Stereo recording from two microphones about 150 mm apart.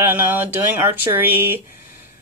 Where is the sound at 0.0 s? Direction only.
15° right (ahead or behind).